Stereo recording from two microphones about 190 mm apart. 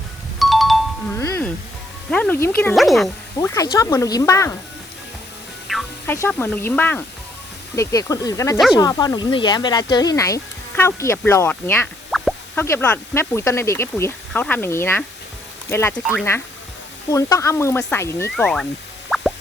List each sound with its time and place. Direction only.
0.3 s music: centre (ahead or behind)
1.2 s music: 15° left (ahead or behind)
2.0 s speech: 5° left (ahead or behind)
2.7 s speech: centre (ahead or behind)
3.3 s speech: 15° left (ahead or behind)
5.7 s music: centre (ahead or behind)
6.1 s speech: 10° left (ahead or behind)
12.1 s plop: centre (ahead or behind)
12.5 s speech: 10° left (ahead or behind)
17.1 s speech: 20° left (ahead or behind)
18.4 s speech: 5° left (ahead or behind)
19.1 s plop: centre (ahead or behind)